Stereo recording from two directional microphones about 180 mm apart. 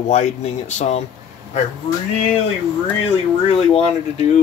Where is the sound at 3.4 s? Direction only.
35° left (ahead or behind).